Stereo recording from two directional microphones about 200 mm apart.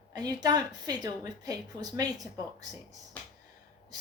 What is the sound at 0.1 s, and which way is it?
A woman's voice, 20° right (ahead or behind).